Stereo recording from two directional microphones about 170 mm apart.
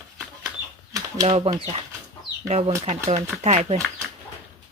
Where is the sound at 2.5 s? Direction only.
40° right (ahead or behind).